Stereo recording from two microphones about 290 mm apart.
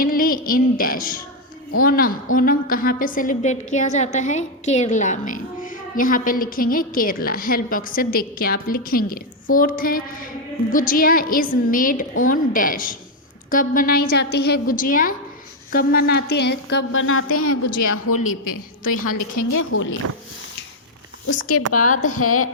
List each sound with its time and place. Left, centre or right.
0.0 s a sound: left
1.8 s a woman's voice: left
19.5 s a woman's voice: left
21.2 s a woman's voice: left